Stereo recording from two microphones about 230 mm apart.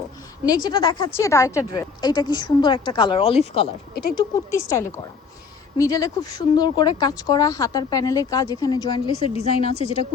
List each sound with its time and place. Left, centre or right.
0.4 s a woman's voice: centre